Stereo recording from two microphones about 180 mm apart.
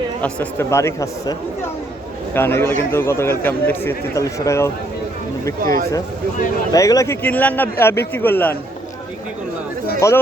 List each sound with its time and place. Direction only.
0.2 s a man's voice: 10° left (ahead or behind)
6.7 s a man's voice: 20° left (ahead or behind)
10.0 s a man's voice: 15° left (ahead or behind)